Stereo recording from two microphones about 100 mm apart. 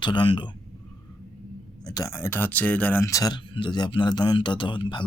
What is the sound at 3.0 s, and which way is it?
Speech, 35° left (ahead or behind).